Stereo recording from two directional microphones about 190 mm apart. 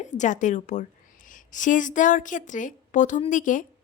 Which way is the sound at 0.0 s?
40° left (ahead or behind).